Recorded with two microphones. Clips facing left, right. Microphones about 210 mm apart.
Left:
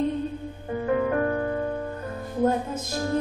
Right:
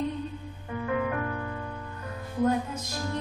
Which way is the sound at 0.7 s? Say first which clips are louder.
Left 5 dB; 35° left (ahead or behind).